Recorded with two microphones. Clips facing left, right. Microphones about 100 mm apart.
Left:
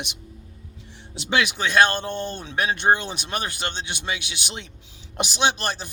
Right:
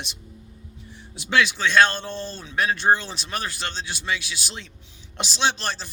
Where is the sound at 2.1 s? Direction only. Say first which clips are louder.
Left 3 dB; 65° left (ahead or behind).